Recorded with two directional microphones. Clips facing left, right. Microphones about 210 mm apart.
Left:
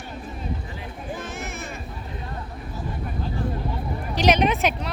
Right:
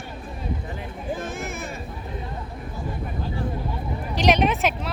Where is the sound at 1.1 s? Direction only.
55° right (ahead or behind).